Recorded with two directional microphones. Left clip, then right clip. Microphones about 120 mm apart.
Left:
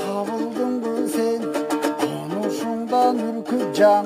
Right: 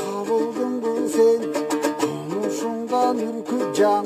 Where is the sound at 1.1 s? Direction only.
45° left (ahead or behind).